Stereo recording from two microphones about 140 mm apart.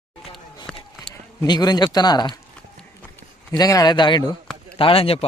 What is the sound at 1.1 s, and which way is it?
Speech, 25° left (ahead or behind).